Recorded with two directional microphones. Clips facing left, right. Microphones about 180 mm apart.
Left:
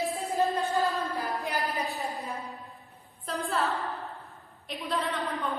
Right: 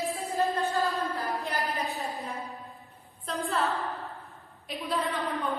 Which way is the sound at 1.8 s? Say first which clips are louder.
Even; centre (ahead or behind).